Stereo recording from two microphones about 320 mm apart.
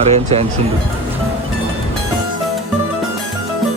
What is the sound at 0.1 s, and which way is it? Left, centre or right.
Speech, centre.